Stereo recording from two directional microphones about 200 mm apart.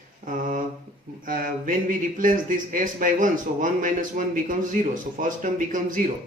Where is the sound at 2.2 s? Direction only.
40° right (ahead or behind).